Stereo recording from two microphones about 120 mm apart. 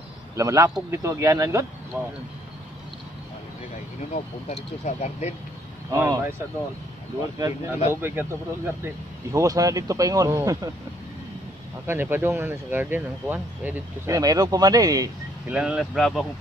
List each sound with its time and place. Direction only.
0.4 s speech: 25° right (ahead or behind)
1.9 s speech: 15° right (ahead or behind)
4.8 s speech: 75° left (ahead or behind)
5.9 s speech: 25° right (ahead or behind)
7.3 s speech: 30° right (ahead or behind)
7.7 s speech: 20° right (ahead or behind)
11.8 s speech: 20° right (ahead or behind)
14.0 s speech: 30° right (ahead or behind)
15.5 s speech: 10° right (ahead or behind)